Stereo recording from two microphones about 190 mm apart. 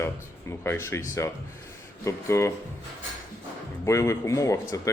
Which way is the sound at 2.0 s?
15° left (ahead or behind).